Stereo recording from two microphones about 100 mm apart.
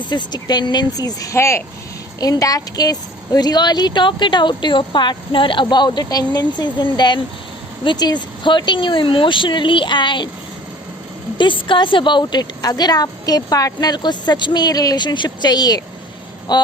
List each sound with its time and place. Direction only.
0.0 s a woman's voice: 50° left (ahead or behind)
11.3 s a woman's voice: 55° left (ahead or behind)